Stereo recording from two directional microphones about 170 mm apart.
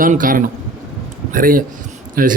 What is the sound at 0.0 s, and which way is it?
A man's voice, 55° right (ahead or behind).